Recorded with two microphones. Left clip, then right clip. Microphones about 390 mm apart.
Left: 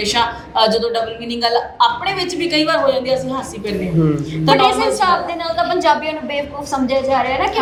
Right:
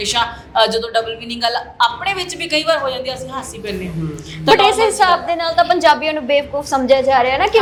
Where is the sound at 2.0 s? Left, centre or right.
Right.